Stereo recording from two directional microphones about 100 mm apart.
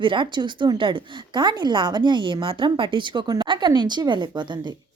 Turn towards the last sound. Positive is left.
turn(degrees=-50)  # may be behind; listen again after turning